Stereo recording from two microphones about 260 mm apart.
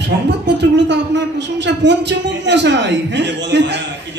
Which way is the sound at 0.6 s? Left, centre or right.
Right.